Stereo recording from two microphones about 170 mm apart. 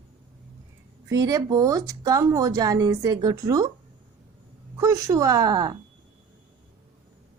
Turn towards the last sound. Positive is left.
turn(degrees=-25)  # may be behind; listen again after turning